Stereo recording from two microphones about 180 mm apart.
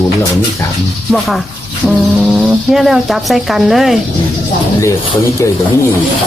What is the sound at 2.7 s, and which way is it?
Speech, centre (ahead or behind).